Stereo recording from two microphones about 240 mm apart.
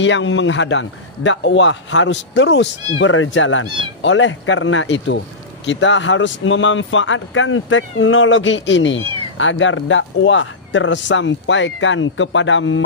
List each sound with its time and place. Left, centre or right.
0.0 s speech: left